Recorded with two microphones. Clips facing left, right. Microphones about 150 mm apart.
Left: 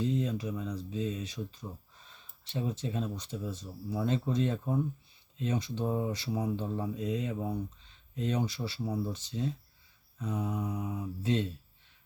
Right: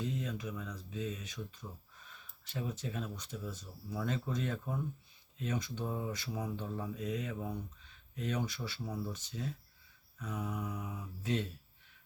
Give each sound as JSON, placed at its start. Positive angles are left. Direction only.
{"t": 0.0, "sound": "speech", "side_deg": 30}